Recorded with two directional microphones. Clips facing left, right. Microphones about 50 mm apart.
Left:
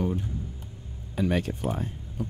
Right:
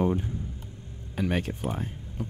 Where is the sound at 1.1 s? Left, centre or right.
Right.